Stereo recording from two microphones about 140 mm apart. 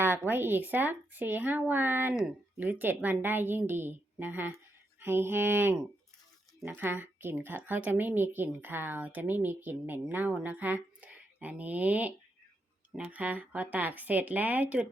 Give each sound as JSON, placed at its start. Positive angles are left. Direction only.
{"t": 0.0, "sound": "speech", "side_deg": -15}